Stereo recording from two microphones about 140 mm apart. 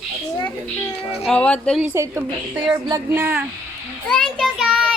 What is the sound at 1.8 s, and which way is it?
A woman's voice, 15° right (ahead or behind).